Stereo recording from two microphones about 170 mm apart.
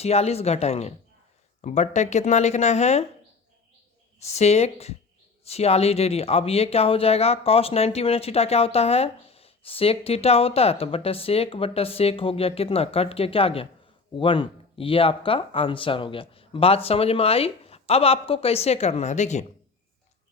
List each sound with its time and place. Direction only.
0.0 s speech: 40° left (ahead or behind)
4.2 s speech: 40° left (ahead or behind)